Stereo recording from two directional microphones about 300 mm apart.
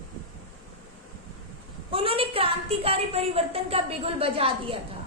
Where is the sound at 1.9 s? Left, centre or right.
Centre.